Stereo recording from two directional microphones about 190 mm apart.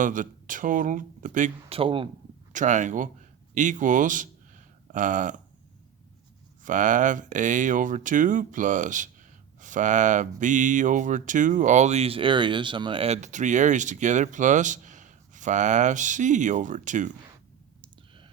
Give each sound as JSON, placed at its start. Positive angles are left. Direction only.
{"t": 0.0, "sound": "speech", "side_deg": -45}
{"t": 1.8, "sound": "speech", "side_deg": -30}
{"t": 2.5, "sound": "speech", "side_deg": -40}
{"t": 6.6, "sound": "speech", "side_deg": -40}